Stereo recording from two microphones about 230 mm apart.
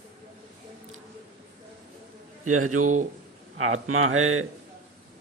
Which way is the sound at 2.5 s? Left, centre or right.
Right.